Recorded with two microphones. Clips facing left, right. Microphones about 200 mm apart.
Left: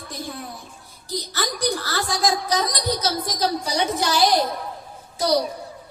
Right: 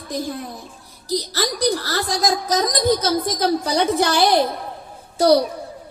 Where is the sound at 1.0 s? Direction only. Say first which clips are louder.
Right 5 dB; 35° right (ahead or behind); by 5.4 s 55° right (ahead or behind).